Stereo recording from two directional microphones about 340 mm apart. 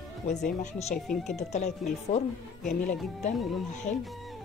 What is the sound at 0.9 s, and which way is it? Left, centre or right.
Speech, centre.